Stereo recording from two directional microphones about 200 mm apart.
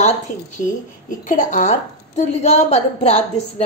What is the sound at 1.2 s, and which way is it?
Speech, 40° left (ahead or behind).